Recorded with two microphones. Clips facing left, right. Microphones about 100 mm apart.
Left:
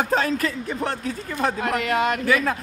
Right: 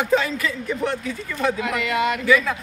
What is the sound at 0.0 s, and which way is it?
A man's voice, 45° left (ahead or behind).